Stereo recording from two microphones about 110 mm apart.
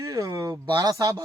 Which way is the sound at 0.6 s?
45° right (ahead or behind).